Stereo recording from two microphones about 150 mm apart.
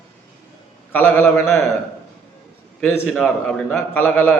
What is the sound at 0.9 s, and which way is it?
Speech, 15° left (ahead or behind).